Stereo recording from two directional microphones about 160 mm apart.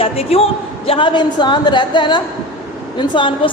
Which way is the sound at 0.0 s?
40° left (ahead or behind).